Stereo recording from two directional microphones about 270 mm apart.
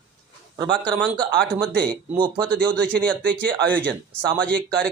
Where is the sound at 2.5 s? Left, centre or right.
Centre.